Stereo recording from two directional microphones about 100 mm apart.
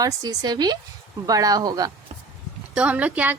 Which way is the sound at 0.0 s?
40° right (ahead or behind).